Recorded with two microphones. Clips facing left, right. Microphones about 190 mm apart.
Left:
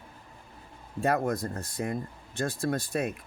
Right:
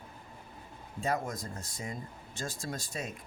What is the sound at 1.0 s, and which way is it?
Speech, 60° left (ahead or behind).